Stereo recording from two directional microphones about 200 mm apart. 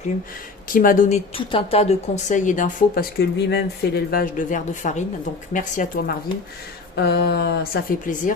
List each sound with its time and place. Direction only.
0.7 s speech: 45° left (ahead or behind)
6.9 s speech: 55° left (ahead or behind)